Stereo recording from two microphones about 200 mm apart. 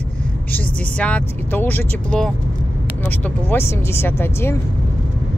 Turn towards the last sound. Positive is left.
turn(degrees=10)  # may be behind; listen again after turning